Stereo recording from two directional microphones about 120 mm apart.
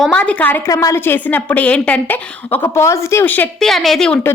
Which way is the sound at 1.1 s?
15° left (ahead or behind).